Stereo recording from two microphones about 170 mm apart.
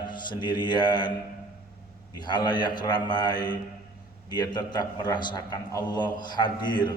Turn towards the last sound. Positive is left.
turn(degrees=25)  # may be behind; listen again after turning